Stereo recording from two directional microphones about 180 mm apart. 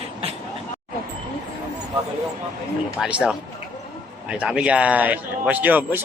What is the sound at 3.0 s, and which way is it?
A man's voice, 5° right (ahead or behind).